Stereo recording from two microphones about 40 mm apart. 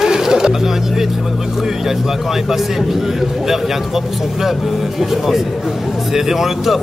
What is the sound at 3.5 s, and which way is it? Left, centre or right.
Speech, centre.